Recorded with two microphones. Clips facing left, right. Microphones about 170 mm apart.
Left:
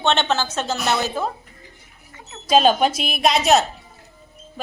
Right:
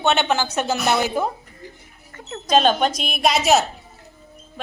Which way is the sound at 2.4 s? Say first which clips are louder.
Left 1 dB; 5° left (ahead or behind).